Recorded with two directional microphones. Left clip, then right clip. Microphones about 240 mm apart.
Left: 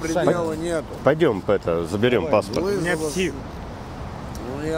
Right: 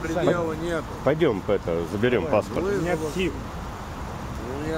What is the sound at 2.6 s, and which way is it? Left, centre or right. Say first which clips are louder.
Speech: left 2 dB; left.